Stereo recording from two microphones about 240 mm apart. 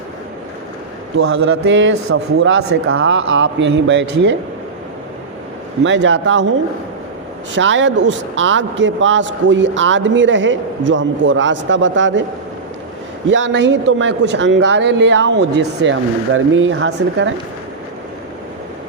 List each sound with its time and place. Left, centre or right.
1.3 s a man's voice: right
5.8 s a man's voice: right
7.5 s a man's voice: right
13.2 s a man's voice: right